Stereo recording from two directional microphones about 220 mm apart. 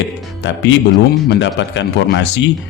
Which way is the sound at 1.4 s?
55° left (ahead or behind).